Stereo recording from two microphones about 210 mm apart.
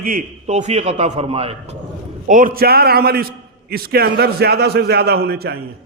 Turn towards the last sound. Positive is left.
turn(degrees=-50)  # may be behind; listen again after turning